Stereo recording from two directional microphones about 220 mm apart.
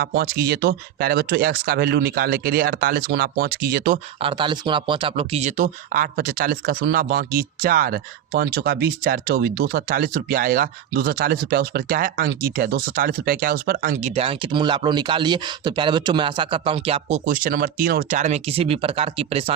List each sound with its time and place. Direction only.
0.0 s speech: 45° right (ahead or behind)
4.2 s speech: 20° right (ahead or behind)